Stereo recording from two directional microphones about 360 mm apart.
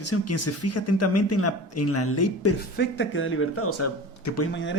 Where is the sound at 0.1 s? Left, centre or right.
Left.